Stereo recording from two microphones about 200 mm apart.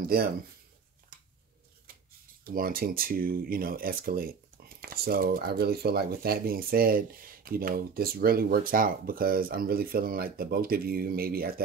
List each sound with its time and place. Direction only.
0.0 s speech: 50° right (ahead or behind)
2.4 s speech: 45° right (ahead or behind)